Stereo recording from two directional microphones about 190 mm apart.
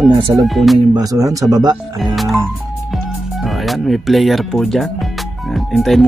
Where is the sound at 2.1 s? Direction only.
Centre (ahead or behind).